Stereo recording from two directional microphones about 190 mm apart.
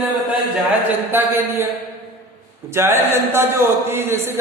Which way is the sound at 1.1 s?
10° right (ahead or behind).